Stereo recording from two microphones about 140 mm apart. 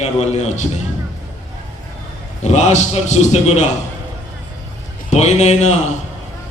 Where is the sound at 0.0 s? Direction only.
55° left (ahead or behind).